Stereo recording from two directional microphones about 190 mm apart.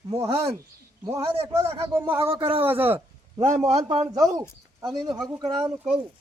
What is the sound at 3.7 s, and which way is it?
Speech, 35° right (ahead or behind).